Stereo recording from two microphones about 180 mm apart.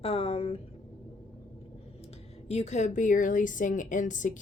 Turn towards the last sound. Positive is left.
turn(degrees=45)  # may be behind; listen again after turning